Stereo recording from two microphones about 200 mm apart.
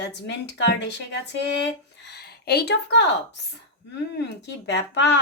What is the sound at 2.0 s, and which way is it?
Speech, 55° left (ahead or behind).